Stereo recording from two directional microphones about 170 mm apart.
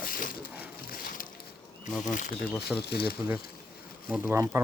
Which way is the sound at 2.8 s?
70° left (ahead or behind).